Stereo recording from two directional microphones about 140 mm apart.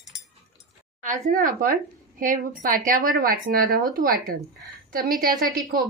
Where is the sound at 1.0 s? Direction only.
65° right (ahead or behind).